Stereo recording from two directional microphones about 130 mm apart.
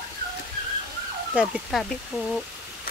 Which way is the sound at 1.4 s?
5° right (ahead or behind).